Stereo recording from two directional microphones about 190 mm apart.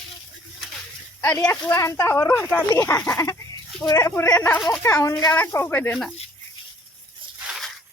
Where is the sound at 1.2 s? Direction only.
10° left (ahead or behind).